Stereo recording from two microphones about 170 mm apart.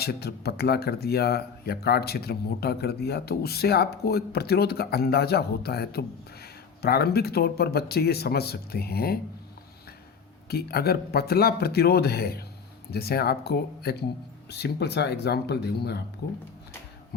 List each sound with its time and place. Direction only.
0.0 s speech: 70° left (ahead or behind)
10.5 s speech: 65° left (ahead or behind)